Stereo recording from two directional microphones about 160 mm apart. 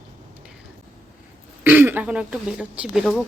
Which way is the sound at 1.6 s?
15° right (ahead or behind).